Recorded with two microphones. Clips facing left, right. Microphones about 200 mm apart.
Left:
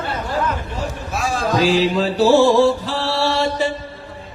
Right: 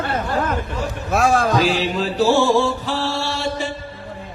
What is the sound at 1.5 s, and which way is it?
Music, 40° left (ahead or behind).